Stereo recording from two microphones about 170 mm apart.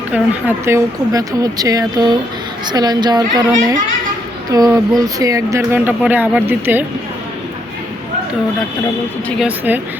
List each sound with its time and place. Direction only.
0.1 s speech: 10° right (ahead or behind)
9.4 s speech: 10° right (ahead or behind)